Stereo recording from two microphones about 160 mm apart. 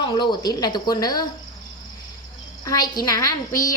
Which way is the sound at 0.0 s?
25° left (ahead or behind).